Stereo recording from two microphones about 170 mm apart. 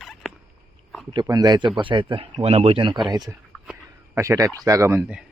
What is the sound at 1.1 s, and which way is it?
A man's voice, 25° right (ahead or behind).